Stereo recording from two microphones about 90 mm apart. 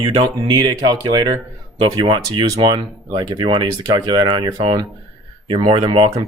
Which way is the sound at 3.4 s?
65° right (ahead or behind).